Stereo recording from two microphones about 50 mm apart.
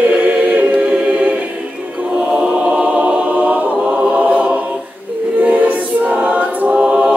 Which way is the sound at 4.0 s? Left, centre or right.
Right.